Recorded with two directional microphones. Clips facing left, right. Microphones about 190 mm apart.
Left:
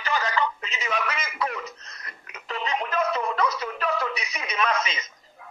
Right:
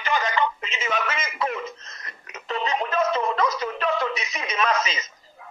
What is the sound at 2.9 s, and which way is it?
A man's voice, 30° right (ahead or behind).